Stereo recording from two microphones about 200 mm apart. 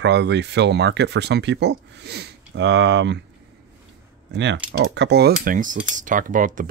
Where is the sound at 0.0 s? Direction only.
60° right (ahead or behind).